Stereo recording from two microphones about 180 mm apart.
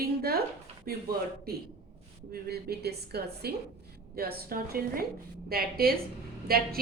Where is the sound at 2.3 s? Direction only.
60° right (ahead or behind).